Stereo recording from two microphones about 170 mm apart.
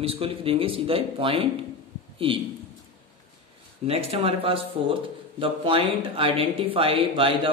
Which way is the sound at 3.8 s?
35° right (ahead or behind).